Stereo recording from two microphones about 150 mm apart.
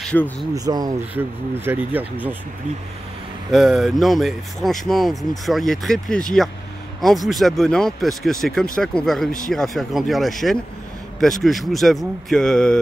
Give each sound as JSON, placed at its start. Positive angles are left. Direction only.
{"t": 0.0, "sound": "speech", "side_deg": 5}
{"t": 0.7, "sound": "speech", "side_deg": -25}
{"t": 1.1, "sound": "speech", "side_deg": -15}
{"t": 3.5, "sound": "speech", "side_deg": 0}